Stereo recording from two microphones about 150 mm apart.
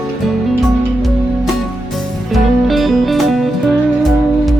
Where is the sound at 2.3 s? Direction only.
Centre (ahead or behind).